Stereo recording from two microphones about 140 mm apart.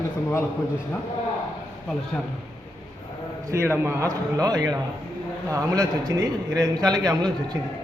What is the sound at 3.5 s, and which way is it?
A man's voice, 20° right (ahead or behind).